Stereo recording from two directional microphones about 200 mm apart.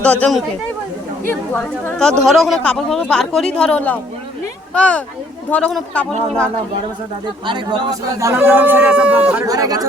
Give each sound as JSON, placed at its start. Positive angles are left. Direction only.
{"t": 0.0, "sound": "a woman's voice", "side_deg": 5}
{"t": 7.4, "sound": "speech", "side_deg": -25}
{"t": 9.5, "sound": "speech", "side_deg": -20}